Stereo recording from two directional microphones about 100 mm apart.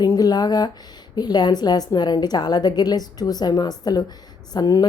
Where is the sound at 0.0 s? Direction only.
40° left (ahead or behind).